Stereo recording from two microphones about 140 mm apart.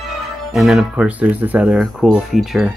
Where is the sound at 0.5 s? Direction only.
Centre (ahead or behind).